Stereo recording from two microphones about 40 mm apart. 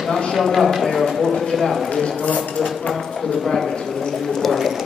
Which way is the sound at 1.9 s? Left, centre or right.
Centre.